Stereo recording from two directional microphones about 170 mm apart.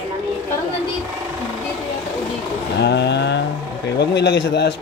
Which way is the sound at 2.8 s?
85° left.